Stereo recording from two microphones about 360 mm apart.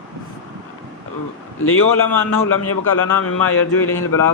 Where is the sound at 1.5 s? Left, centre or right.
Left.